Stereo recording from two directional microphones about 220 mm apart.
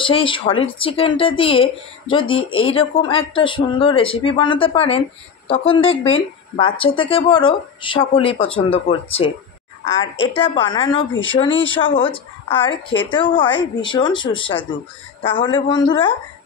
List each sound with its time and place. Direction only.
0.0 s speech: 25° left (ahead or behind)
5.8 s speech: 65° left (ahead or behind)
6.5 s speech: 25° left (ahead or behind)
9.9 s speech: 60° left (ahead or behind)
10.3 s speech: 25° left (ahead or behind)